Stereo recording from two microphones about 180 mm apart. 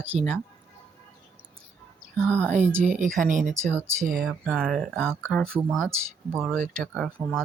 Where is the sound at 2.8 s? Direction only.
45° right (ahead or behind).